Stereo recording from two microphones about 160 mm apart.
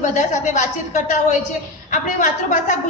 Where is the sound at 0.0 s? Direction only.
50° left (ahead or behind).